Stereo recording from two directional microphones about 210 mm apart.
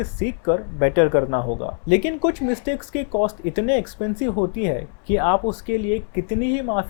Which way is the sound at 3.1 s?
30° left (ahead or behind).